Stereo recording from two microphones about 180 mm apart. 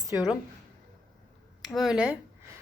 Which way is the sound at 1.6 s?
Centre (ahead or behind).